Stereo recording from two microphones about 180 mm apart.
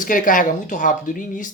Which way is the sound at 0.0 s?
45° left (ahead or behind).